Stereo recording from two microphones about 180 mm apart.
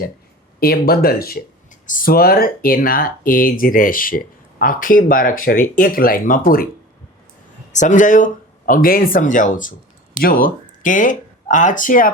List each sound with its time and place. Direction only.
0.6 s speech: 55° left (ahead or behind)
7.7 s speech: 45° left (ahead or behind)